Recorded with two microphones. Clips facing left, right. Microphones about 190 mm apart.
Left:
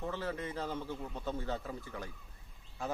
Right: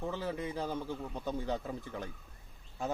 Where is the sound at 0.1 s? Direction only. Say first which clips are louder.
Right 2 dB; 10° right (ahead or behind).